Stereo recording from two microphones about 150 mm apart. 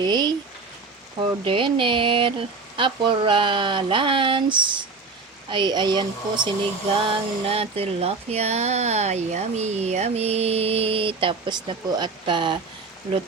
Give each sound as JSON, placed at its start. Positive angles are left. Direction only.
{"t": 0.0, "sound": "speech", "side_deg": -30}